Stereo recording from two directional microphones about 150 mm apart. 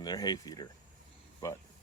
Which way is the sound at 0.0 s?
25° left (ahead or behind).